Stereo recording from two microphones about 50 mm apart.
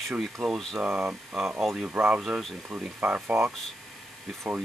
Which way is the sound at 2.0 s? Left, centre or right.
Right.